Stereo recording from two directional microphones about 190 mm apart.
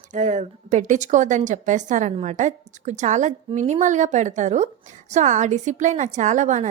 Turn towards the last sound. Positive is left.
turn(degrees=-40)  # may be behind; listen again after turning